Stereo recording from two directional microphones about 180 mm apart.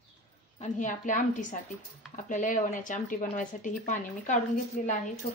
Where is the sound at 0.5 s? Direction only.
40° left (ahead or behind).